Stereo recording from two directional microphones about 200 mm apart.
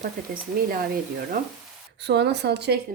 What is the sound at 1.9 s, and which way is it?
Speech, 55° right (ahead or behind).